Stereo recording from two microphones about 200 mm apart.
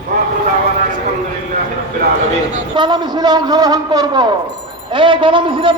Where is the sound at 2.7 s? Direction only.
20° right (ahead or behind).